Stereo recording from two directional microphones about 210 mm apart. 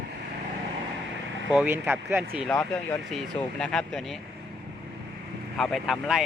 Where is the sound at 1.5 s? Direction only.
10° right (ahead or behind).